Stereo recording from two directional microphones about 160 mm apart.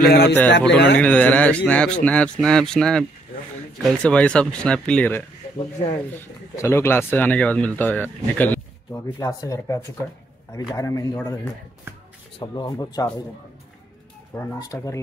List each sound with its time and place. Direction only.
0.0 s a man's voice: 85° left
0.9 s speech: 10° left (ahead or behind)
6.5 s speech: 15° left (ahead or behind)
9.0 s speech: 20° left (ahead or behind)
12.4 s speech: 25° left (ahead or behind)
14.3 s speech: 20° left (ahead or behind)